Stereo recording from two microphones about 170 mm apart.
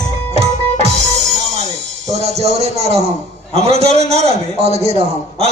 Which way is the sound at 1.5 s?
40° right (ahead or behind).